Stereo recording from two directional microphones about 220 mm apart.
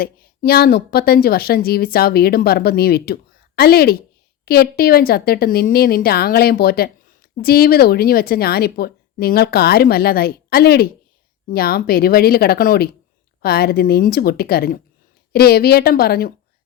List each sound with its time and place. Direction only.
0.0 s speech: 45° left (ahead or behind)